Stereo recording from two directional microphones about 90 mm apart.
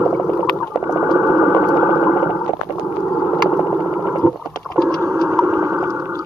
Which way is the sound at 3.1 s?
5° right (ahead or behind).